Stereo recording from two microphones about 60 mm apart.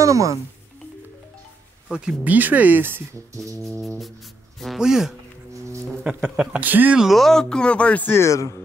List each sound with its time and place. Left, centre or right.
0.0 s speech: right
1.9 s speech: centre
2.2 s speech: right
3.3 s music: right
4.7 s speech: centre
6.6 s speech: right
7.0 s speech: centre; by 8.1 s left
8.1 s speech: left